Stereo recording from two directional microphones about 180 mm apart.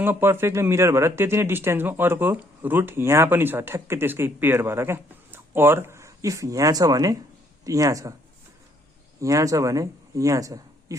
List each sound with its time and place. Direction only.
0.0 s a man's voice: 10° right (ahead or behind)
9.2 s speech: 20° right (ahead or behind)